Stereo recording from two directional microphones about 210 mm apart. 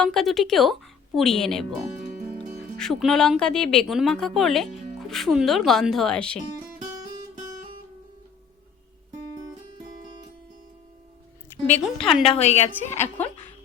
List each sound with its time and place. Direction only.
0.0 s a woman's voice: centre (ahead or behind)
2.0 s music: 45° right (ahead or behind)
2.7 s a woman's voice: centre (ahead or behind)
11.6 s a woman's voice: 5° left (ahead or behind)
12.3 s a woman's voice: 30° left (ahead or behind)